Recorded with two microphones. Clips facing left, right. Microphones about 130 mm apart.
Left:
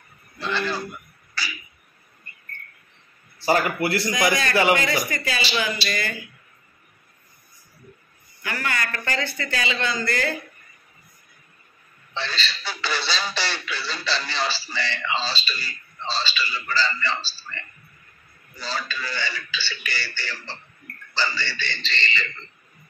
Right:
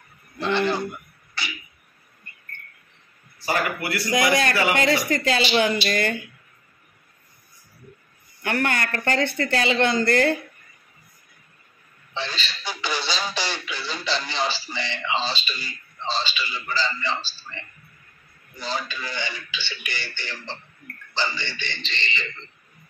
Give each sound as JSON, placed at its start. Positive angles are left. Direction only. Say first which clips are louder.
{"t": 0.4, "sound": "a man's voice", "louder": "right 4 dB", "side_deg": -20}
{"t": 1.4, "sound": "a sound", "louder": "left 1 dB", "side_deg": -20}
{"t": 3.3, "sound": "speech", "louder": "left 4 dB", "side_deg": 25}
{"t": 4.1, "sound": "speech", "louder": "right 6 dB", "side_deg": -60}
{"t": 8.4, "sound": "speech", "louder": "right 4 dB", "side_deg": -60}
{"t": 12.1, "sound": "speech", "louder": "left 1 dB", "side_deg": -15}